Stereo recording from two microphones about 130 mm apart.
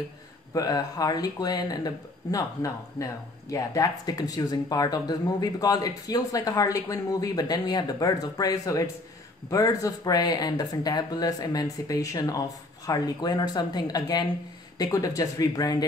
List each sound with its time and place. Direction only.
0.5 s speech: 30° left (ahead or behind)